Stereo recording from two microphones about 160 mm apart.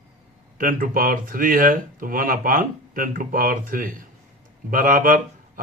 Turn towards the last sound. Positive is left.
turn(degrees=-55)  # may be behind; listen again after turning